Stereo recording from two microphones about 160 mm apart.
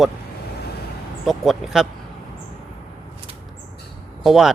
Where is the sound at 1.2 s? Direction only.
Centre (ahead or behind).